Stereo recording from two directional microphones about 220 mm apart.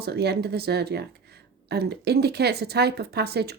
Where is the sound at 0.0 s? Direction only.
45° right (ahead or behind).